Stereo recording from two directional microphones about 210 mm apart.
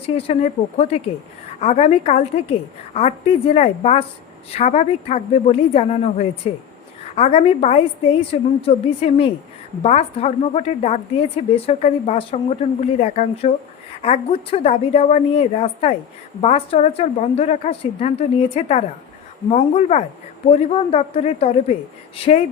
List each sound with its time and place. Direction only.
0.2 s a woman's voice: 30° left (ahead or behind)